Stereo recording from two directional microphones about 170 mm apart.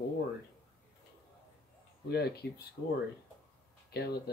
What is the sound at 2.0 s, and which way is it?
Speech, 70° left (ahead or behind).